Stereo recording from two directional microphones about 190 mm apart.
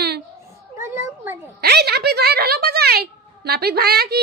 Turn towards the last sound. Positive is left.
turn(degrees=-55)  # may be behind; listen again after turning